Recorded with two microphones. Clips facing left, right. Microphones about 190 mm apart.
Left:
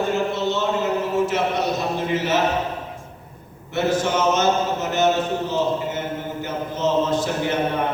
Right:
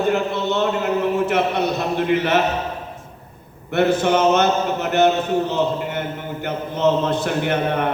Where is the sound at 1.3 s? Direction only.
60° right (ahead or behind).